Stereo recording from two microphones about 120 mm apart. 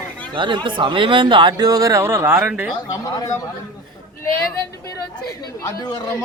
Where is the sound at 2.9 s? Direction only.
30° left (ahead or behind).